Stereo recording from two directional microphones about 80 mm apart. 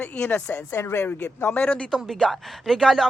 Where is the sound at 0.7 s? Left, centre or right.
Left.